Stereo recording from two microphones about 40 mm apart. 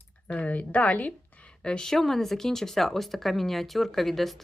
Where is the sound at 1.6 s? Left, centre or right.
Left.